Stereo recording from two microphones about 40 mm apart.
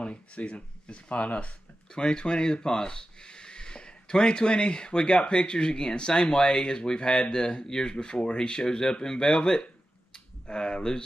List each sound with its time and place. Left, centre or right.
0.0 s speech: left